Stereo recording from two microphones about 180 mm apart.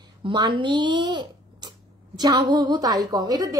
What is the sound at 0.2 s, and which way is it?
A woman's voice, 25° right (ahead or behind).